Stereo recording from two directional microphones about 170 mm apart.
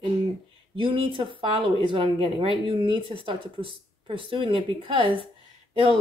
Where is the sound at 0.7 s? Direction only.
30° right (ahead or behind).